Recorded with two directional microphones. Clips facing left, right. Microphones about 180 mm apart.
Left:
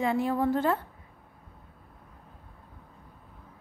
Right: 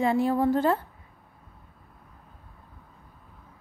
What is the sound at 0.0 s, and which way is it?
Speech, 35° right (ahead or behind).